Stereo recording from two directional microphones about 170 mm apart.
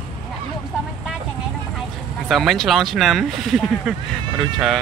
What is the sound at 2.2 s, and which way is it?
Speech, centre (ahead or behind).